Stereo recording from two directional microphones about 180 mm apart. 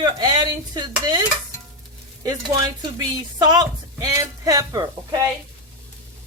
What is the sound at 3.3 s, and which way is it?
A man's voice, 20° right (ahead or behind).